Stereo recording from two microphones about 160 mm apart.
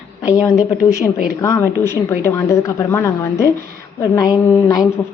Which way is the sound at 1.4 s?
15° left (ahead or behind).